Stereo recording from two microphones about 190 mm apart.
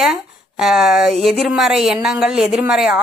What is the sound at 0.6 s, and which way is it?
A woman's voice, centre (ahead or behind).